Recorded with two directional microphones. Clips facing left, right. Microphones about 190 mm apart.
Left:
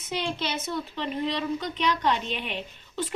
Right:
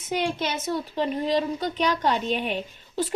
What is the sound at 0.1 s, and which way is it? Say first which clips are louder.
A woman's voice: right 4 dB; 50° right (ahead or behind).